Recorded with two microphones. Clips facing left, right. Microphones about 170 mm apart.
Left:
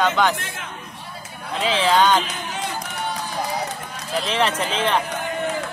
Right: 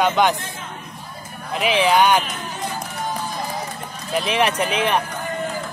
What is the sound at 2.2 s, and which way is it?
Speech, 70° left (ahead or behind).